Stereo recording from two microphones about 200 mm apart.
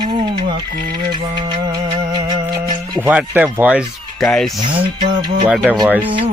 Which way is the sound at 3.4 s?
5° right (ahead or behind).